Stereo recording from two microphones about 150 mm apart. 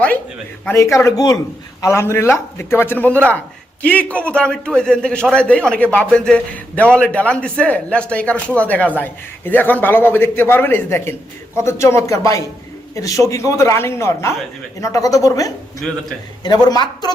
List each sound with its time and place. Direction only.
0.9 s a man's voice: 20° left (ahead or behind)